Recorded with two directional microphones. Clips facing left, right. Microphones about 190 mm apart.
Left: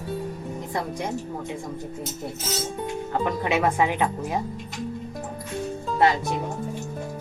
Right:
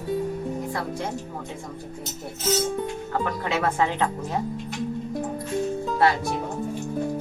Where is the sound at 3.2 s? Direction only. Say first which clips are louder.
Left 3 dB; 15° left (ahead or behind).